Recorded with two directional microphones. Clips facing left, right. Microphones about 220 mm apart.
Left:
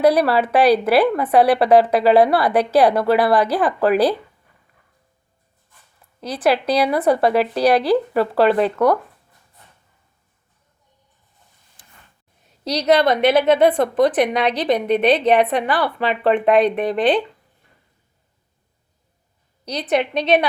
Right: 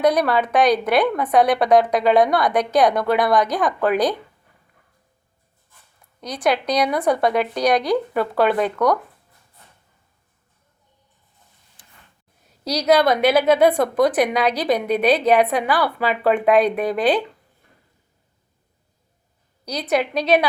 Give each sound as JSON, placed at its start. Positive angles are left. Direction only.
{"t": 0.0, "sound": "a woman's voice", "side_deg": 5}
{"t": 6.2, "sound": "a woman's voice", "side_deg": 5}
{"t": 12.6, "sound": "a woman's voice", "side_deg": -5}
{"t": 19.6, "sound": "a woman's voice", "side_deg": -5}